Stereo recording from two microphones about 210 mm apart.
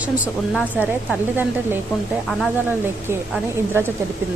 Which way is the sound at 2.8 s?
10° right (ahead or behind).